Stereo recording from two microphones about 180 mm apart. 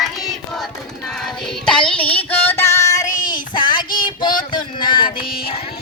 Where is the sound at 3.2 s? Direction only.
25° left (ahead or behind).